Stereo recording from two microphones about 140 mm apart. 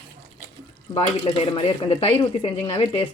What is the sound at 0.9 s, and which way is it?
Speech, 35° left (ahead or behind).